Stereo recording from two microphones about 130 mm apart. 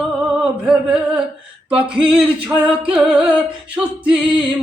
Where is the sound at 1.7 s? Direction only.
5° right (ahead or behind).